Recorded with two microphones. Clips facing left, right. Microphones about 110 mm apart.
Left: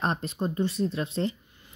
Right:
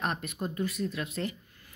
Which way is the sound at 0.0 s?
30° left (ahead or behind).